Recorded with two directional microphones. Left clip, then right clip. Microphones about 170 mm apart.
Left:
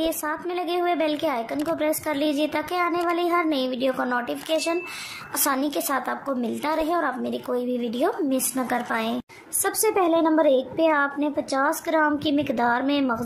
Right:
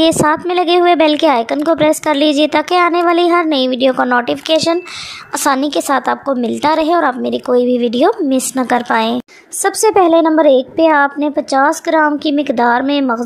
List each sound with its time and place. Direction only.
0.0 s a woman's voice: 45° right (ahead or behind)